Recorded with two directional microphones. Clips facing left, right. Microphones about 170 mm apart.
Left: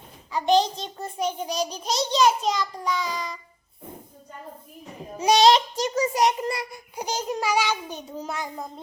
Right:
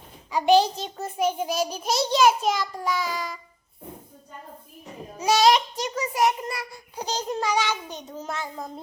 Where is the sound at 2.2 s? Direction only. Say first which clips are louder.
Even; 5° right (ahead or behind).